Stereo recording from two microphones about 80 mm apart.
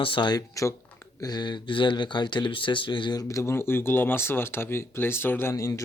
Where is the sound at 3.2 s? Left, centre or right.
Left.